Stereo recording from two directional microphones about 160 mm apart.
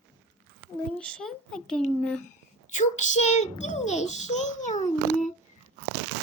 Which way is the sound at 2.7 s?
50° left (ahead or behind).